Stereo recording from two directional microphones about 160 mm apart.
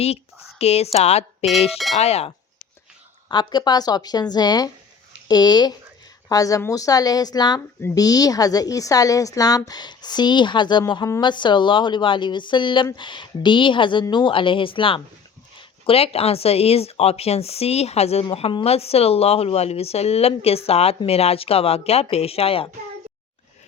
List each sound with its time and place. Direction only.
0.6 s speech: 40° left (ahead or behind)
3.2 s a woman's voice: 30° left (ahead or behind)